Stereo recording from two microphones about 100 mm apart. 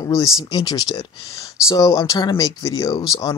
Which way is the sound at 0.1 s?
40° left (ahead or behind).